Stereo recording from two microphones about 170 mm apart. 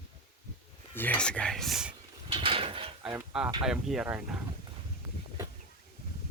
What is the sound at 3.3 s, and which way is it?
Speech, 5° right (ahead or behind).